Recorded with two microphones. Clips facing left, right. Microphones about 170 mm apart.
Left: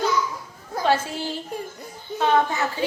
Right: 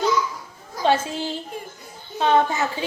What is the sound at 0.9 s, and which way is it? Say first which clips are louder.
Speech: right 2 dB; 20° right (ahead or behind).